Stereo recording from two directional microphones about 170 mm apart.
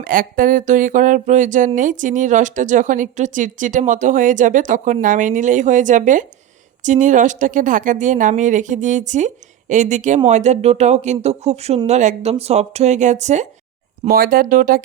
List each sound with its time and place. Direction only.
0.0 s speech: 55° right (ahead or behind)
14.1 s speech: 60° right (ahead or behind)